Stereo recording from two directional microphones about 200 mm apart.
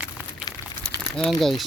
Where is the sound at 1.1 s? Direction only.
Centre (ahead or behind).